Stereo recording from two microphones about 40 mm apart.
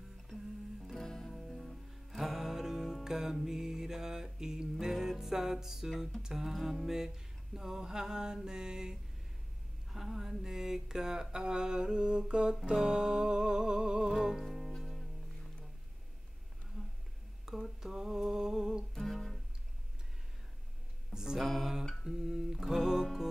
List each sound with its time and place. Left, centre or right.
0.3 s music: centre
2.0 s music: centre
7.5 s humming: centre
9.9 s humming: centre
10.4 s a sound: centre
14.4 s music: centre
17.5 s humming: centre
18.9 s music: centre
21.1 s music: centre
21.4 s music: centre
22.0 s humming: centre